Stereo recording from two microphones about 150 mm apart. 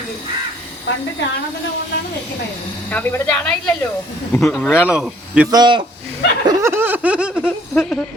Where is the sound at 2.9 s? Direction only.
10° left (ahead or behind); by 5.5 s 5° right (ahead or behind).